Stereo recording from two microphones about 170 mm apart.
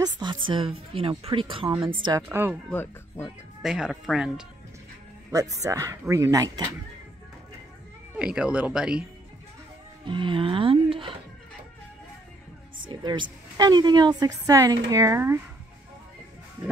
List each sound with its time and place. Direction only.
0.0 s a woman's voice: 25° right (ahead or behind)
2.2 s speech: 10° right (ahead or behind)
2.7 s speech: 10° left (ahead or behind)
3.6 s speech: 5° right (ahead or behind)
5.3 s a woman's voice: 20° right (ahead or behind)
8.2 s speech: 5° right (ahead or behind)
10.0 s a woman's voice: 30° right (ahead or behind)
12.8 s a woman's voice: 25° right (ahead or behind)